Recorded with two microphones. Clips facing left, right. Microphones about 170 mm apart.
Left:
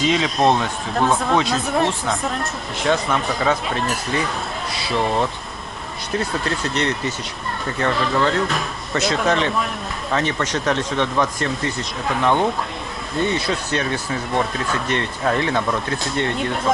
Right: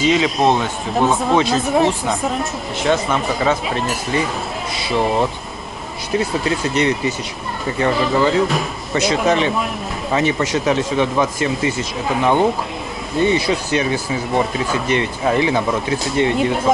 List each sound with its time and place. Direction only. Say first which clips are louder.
0.0 s speech: right 2 dB; centre (ahead or behind)
8.9 s speech: right 3 dB; 15° right (ahead or behind)